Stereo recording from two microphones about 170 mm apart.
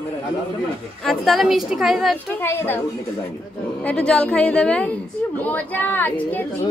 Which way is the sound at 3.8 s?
5° left (ahead or behind).